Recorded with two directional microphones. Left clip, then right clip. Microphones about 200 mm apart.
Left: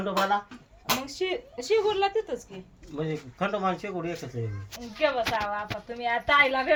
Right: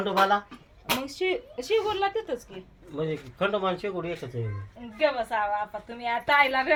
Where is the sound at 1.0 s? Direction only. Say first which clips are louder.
Right 2 dB; 10° left (ahead or behind).